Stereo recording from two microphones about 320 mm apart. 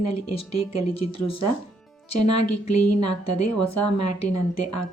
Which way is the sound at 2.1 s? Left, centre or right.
Left.